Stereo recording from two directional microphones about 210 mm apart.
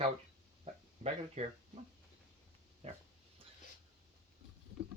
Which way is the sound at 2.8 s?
30° right (ahead or behind).